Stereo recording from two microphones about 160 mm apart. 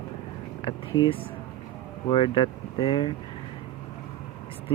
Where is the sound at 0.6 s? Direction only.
30° left (ahead or behind).